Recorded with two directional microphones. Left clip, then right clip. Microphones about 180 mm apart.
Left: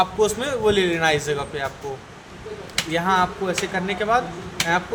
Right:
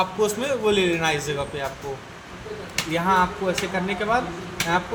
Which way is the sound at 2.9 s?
30° left (ahead or behind).